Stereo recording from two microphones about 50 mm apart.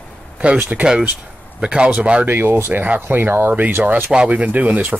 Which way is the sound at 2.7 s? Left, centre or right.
Right.